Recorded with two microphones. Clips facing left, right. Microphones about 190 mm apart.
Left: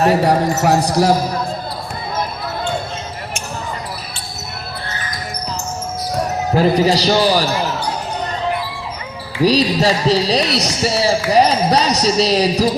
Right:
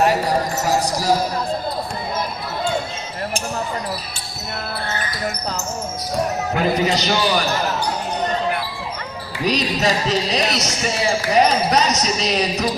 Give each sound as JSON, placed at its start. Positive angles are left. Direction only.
{"t": 0.3, "sound": "speech", "side_deg": 65}
{"t": 6.5, "sound": "speech", "side_deg": 35}
{"t": 9.4, "sound": "speech", "side_deg": 35}